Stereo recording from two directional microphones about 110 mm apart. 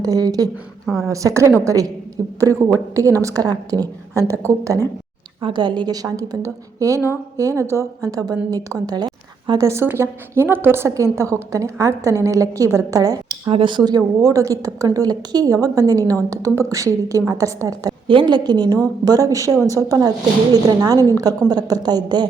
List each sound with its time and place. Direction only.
0.0 s a woman's voice: 35° right (ahead or behind)
5.4 s a woman's voice: 50° right (ahead or behind)
13.5 s a woman's voice: 50° right (ahead or behind); by 17.9 s 30° right (ahead or behind)
18.1 s a woman's voice: 45° right (ahead or behind)